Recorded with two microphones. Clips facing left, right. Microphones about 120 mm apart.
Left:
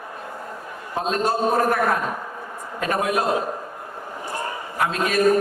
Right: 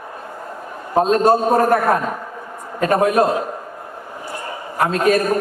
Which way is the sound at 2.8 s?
45° right (ahead or behind).